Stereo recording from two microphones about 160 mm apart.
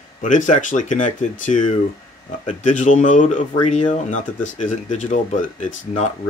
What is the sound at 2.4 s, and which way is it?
Speech, 50° left (ahead or behind).